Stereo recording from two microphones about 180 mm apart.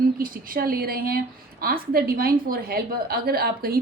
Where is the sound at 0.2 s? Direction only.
55° right (ahead or behind).